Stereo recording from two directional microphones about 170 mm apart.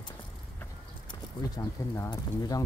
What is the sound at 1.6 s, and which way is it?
Speech, 20° left (ahead or behind).